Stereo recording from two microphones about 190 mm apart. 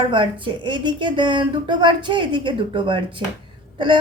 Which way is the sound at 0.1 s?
25° right (ahead or behind).